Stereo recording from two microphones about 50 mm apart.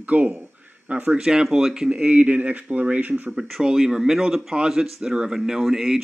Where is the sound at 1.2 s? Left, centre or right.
Centre; by 3.3 s right.